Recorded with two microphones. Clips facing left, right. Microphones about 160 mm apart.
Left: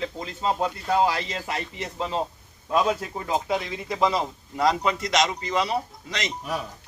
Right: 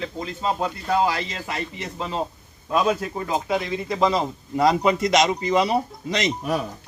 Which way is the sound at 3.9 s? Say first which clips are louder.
Right 2 dB; 5° left (ahead or behind).